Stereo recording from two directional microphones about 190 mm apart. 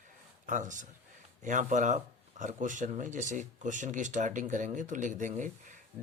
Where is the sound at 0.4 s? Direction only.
40° right (ahead or behind).